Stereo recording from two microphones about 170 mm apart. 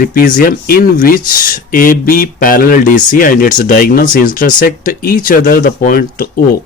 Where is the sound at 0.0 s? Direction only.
55° left (ahead or behind).